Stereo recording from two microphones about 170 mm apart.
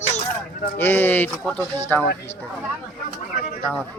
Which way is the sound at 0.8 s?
10° left (ahead or behind).